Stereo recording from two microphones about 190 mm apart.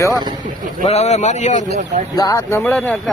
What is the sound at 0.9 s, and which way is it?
Speech, 35° left (ahead or behind).